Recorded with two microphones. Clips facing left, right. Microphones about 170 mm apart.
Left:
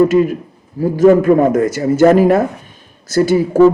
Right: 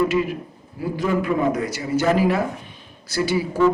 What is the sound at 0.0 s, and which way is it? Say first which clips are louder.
A man's voice: left 9 dB; 45° left (ahead or behind).